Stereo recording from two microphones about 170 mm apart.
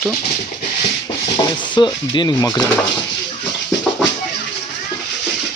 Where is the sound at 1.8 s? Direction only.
25° left (ahead or behind).